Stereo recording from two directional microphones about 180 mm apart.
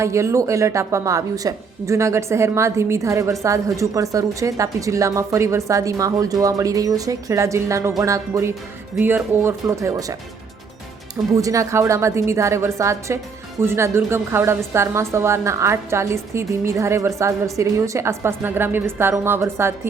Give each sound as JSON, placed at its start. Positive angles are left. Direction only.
{"t": 0.0, "sound": "a woman's voice", "side_deg": -15}
{"t": 11.3, "sound": "a woman's voice", "side_deg": -20}